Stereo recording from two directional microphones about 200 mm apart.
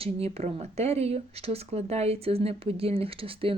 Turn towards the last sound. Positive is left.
turn(degrees=-25)  # may be behind; listen again after turning